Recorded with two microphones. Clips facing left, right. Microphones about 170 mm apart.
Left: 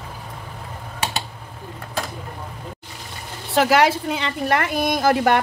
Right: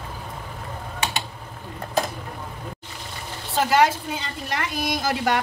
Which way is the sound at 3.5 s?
75° left (ahead or behind).